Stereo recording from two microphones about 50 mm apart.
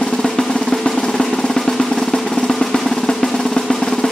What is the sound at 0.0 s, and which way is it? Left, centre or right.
Drum roll, centre.